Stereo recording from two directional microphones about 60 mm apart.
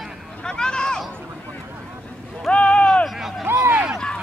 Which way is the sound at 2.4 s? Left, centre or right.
Centre.